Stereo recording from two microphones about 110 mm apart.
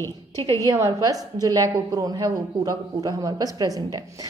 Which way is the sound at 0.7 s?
30° right (ahead or behind).